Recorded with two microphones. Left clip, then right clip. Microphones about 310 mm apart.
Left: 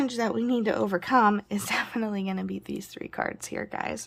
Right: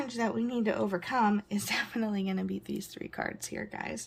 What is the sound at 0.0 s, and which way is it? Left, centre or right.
Speech, centre.